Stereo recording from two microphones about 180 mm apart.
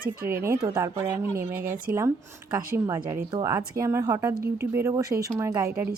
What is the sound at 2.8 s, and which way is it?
Speech, 20° right (ahead or behind).